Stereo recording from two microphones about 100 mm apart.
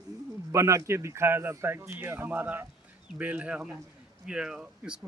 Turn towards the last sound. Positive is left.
turn(degrees=-5)  # may be behind; listen again after turning